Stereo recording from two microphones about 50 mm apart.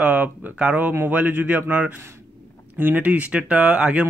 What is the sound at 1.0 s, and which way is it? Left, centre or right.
Speech, right.